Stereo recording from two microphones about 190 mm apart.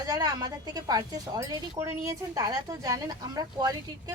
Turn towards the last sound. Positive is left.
turn(degrees=-20)  # may be behind; listen again after turning